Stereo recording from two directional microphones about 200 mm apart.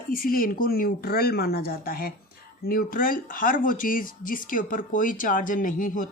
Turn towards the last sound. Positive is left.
turn(degrees=40)  # may be behind; listen again after turning